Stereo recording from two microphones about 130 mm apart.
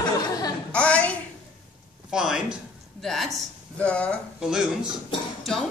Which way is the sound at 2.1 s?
5° right (ahead or behind).